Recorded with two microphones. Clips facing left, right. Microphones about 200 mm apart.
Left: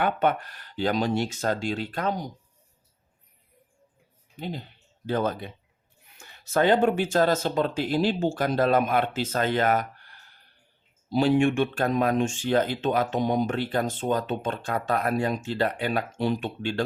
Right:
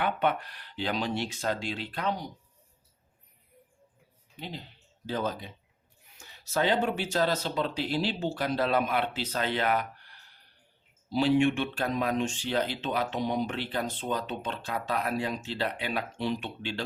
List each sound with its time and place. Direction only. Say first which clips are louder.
0.0 s speech: left 4 dB; 45° left (ahead or behind)
4.4 s speech: left 6 dB; 50° left (ahead or behind)